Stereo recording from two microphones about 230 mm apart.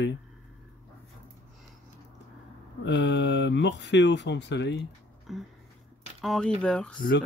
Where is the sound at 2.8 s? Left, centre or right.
Left.